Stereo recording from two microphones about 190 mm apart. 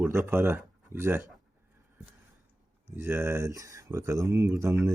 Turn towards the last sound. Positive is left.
turn(degrees=-15)  # may be behind; listen again after turning